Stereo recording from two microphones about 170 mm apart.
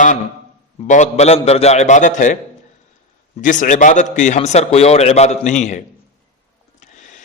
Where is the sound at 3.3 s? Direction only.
45° left (ahead or behind).